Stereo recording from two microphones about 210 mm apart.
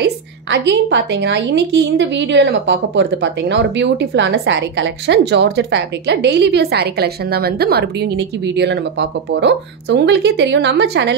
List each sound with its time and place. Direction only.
0.0 s a woman's voice: 60° right (ahead or behind)